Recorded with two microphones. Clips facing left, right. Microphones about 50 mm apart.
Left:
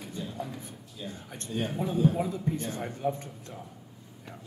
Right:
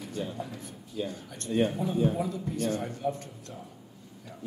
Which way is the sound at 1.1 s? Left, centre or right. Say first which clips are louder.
Right 5 dB; left.